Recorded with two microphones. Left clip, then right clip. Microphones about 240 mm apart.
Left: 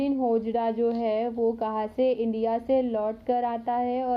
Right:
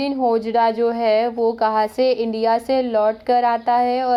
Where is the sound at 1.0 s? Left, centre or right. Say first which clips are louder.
Right 8 dB; centre.